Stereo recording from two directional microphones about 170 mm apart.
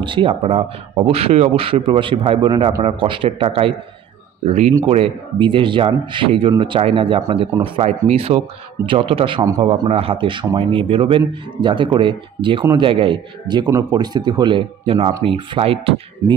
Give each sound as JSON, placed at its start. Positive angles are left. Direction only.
{"t": 0.0, "sound": "speech", "side_deg": -30}